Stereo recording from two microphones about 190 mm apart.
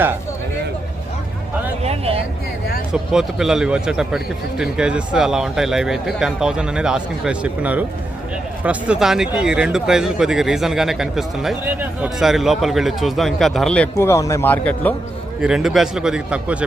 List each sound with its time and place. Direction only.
1.8 s a sound: 30° right (ahead or behind)
2.9 s speech: centre (ahead or behind)
13.9 s a man's voice: 15° left (ahead or behind)
15.4 s speech: 5° right (ahead or behind)